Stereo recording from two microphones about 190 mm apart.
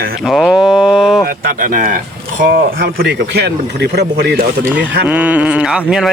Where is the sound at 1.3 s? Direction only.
45° right (ahead or behind).